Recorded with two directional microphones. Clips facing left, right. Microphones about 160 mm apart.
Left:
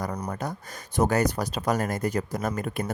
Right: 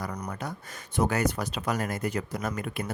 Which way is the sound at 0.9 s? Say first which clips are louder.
Left 3 dB; 40° left (ahead or behind).